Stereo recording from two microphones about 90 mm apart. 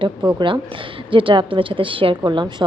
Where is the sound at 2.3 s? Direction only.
55° right (ahead or behind).